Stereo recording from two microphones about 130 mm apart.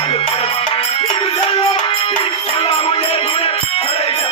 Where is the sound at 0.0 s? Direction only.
45° left (ahead or behind).